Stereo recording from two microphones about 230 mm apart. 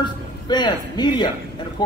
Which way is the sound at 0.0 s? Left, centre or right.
Centre.